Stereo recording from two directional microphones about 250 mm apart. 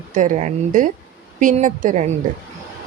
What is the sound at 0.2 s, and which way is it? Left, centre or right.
A woman's voice, right.